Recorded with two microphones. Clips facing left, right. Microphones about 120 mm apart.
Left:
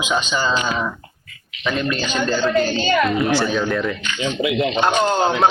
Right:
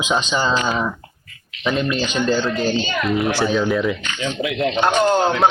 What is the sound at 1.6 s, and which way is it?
Speech, 20° right (ahead or behind).